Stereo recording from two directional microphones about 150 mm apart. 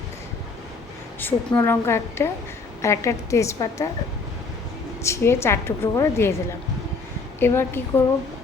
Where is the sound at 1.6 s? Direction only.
15° left (ahead or behind).